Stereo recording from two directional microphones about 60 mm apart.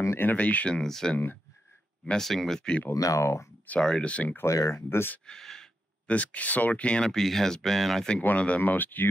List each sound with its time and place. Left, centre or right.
0.2 s speech: left
0.7 s speech: centre
1.1 s speech: left
2.0 s speech: centre
2.9 s speech: left
3.8 s speech: centre
4.5 s speech: left
5.2 s speech: centre
6.0 s speech: left
7.1 s speech: centre
8.4 s speech: left